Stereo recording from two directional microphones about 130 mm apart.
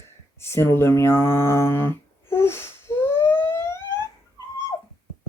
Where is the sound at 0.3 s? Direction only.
20° left (ahead or behind).